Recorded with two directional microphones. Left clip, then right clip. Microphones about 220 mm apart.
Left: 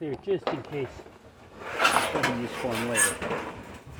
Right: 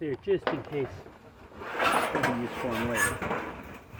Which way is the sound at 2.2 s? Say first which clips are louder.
Left 1 dB; centre (ahead or behind).